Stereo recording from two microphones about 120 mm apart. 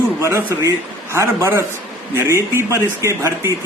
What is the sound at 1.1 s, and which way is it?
A man's voice, 25° right (ahead or behind).